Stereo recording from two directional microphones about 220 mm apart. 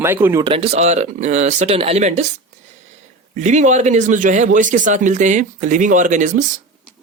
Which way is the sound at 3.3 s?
35° right (ahead or behind).